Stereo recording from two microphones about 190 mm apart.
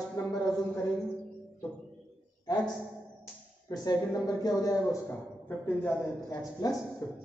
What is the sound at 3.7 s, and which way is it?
A man's voice, 20° left (ahead or behind).